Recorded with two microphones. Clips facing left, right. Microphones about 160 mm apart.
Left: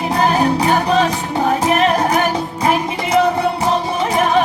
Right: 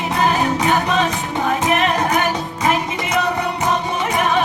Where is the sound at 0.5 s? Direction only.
35° left (ahead or behind).